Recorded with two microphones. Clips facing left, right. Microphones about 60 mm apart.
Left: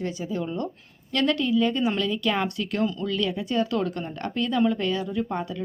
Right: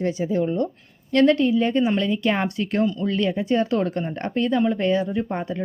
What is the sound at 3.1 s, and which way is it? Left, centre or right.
Speech, right.